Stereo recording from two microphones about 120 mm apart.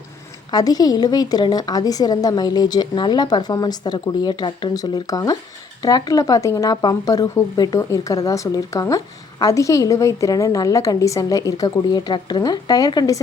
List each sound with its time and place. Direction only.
0.5 s a woman's voice: 35° left (ahead or behind)